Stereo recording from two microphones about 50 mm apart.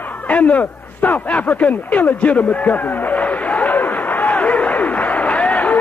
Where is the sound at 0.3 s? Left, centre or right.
Left.